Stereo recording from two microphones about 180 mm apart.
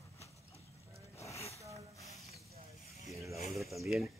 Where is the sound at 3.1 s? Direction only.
15° right (ahead or behind).